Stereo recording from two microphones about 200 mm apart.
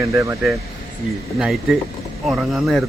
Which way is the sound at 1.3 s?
Centre (ahead or behind).